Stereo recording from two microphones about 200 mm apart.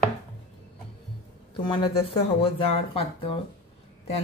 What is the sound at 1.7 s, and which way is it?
A woman's voice, 25° left (ahead or behind).